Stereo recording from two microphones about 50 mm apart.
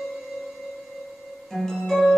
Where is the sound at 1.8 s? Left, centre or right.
Centre.